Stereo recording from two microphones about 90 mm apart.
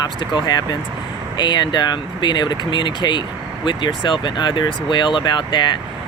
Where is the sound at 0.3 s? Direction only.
50° left (ahead or behind).